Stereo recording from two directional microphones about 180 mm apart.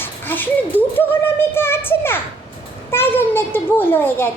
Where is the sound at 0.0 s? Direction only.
10° left (ahead or behind).